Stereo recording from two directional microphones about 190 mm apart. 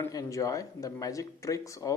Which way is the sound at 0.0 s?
15° left (ahead or behind).